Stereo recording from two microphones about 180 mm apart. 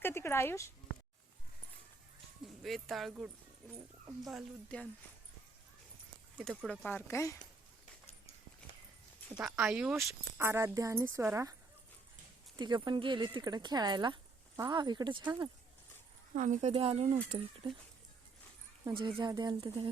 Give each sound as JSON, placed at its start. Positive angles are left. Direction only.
{"t": 0.0, "sound": "speech", "side_deg": 15}
{"t": 2.6, "sound": "speech", "side_deg": 0}
{"t": 4.3, "sound": "speech", "side_deg": 0}
{"t": 6.3, "sound": "speech", "side_deg": -5}
{"t": 6.7, "sound": "speech", "side_deg": 10}
{"t": 9.3, "sound": "speech", "side_deg": -5}
{"t": 12.5, "sound": "speech", "side_deg": -25}
{"t": 16.3, "sound": "speech", "side_deg": -45}
{"t": 18.9, "sound": "speech", "side_deg": -25}